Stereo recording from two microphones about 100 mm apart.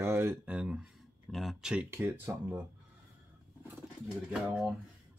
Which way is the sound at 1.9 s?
20° right (ahead or behind).